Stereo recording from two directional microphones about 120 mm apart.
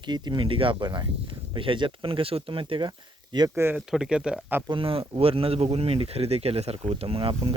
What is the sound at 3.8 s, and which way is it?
Speech, 5° right (ahead or behind).